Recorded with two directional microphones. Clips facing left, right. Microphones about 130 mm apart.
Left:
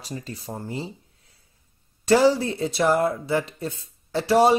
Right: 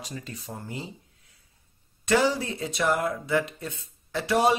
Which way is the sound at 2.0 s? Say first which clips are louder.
Left 6 dB; 35° left (ahead or behind).